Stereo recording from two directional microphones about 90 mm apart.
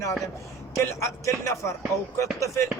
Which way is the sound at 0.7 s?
35° left (ahead or behind).